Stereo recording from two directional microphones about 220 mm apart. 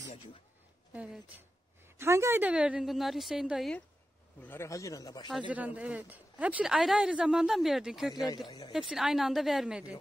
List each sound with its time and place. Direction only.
2.0 s speech: 10° right (ahead or behind)
4.4 s speech: 10° left (ahead or behind)
5.5 s speech: 5° right (ahead or behind)
8.5 s speech: 20° left (ahead or behind)
8.7 s speech: centre (ahead or behind)